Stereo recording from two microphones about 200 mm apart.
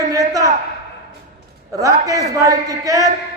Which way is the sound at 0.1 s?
15° right (ahead or behind).